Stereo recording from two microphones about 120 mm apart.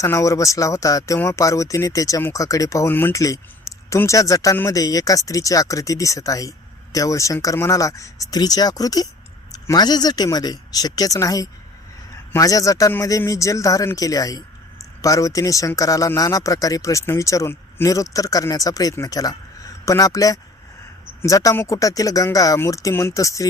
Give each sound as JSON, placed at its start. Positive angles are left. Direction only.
{"t": 0.0, "sound": "a man's voice", "side_deg": 25}